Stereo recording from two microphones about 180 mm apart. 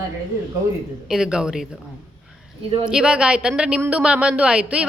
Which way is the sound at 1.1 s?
5° right (ahead or behind).